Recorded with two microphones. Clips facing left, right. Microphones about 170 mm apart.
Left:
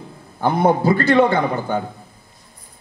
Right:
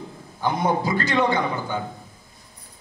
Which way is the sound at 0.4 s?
60° left (ahead or behind).